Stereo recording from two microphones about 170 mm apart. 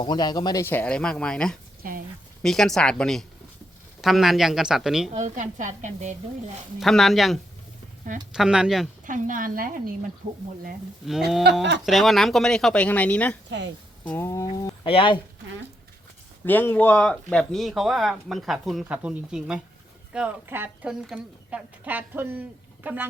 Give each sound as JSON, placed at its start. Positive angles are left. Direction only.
{"t": 0.0, "sound": "speech", "side_deg": 25}
{"t": 5.1, "sound": "stir", "side_deg": -45}
{"t": 6.7, "sound": "speech", "side_deg": 0}
{"t": 9.0, "sound": "stir", "side_deg": -50}
{"t": 10.2, "sound": "speech", "side_deg": -40}
{"t": 11.5, "sound": "speech", "side_deg": -80}
{"t": 11.9, "sound": "speech", "side_deg": 0}
{"t": 13.5, "sound": "speech", "side_deg": -90}
{"t": 14.0, "sound": "speech", "side_deg": 10}
{"t": 14.8, "sound": "speech", "side_deg": 30}
{"t": 16.5, "sound": "a woman's voice", "side_deg": 10}